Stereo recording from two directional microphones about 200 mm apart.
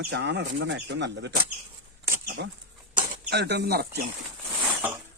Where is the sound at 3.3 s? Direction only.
55° right (ahead or behind).